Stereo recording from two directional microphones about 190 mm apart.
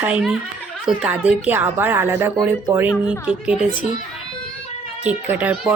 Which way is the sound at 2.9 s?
20° left (ahead or behind).